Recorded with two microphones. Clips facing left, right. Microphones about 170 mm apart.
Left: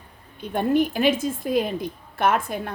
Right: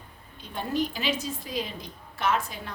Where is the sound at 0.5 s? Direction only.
55° left (ahead or behind).